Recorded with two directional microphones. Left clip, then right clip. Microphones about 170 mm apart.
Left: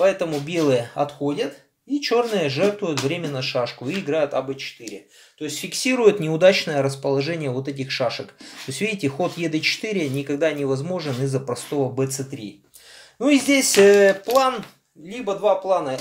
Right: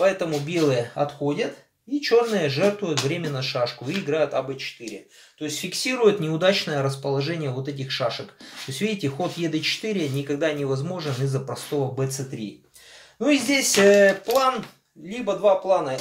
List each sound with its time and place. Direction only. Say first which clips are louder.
0.0 s speech: left 2 dB; 35° left (ahead or behind)
13.2 s speech: left 3 dB; 40° left (ahead or behind)